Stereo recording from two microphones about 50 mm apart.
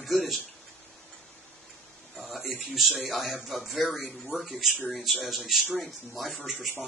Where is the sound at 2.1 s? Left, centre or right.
Centre.